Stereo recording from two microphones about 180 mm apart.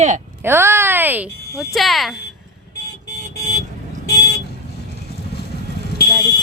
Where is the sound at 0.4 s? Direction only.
15° right (ahead or behind).